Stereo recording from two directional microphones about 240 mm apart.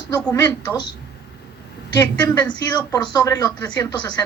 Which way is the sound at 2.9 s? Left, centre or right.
Centre.